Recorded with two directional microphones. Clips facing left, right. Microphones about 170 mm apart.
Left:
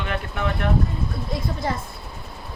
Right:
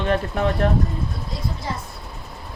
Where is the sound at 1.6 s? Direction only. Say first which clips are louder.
Left 4 dB; 55° left (ahead or behind).